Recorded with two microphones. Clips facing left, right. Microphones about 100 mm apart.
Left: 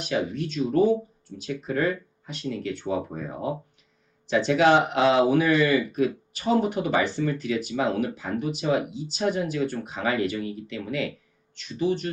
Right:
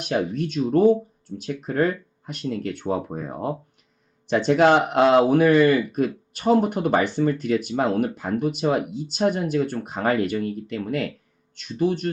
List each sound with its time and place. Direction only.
0.0 s speech: 55° right (ahead or behind)